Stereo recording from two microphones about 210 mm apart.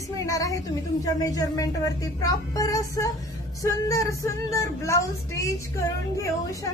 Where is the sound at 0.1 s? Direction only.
15° left (ahead or behind).